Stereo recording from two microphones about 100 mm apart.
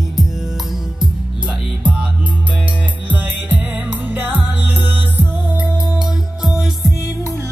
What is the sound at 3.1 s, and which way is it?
Music, 15° right (ahead or behind).